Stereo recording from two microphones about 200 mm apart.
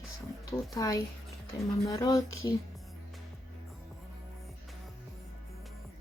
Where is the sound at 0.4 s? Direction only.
15° left (ahead or behind).